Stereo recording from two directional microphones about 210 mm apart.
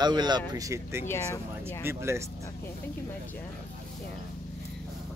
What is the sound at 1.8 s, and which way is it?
Speech, 10° right (ahead or behind).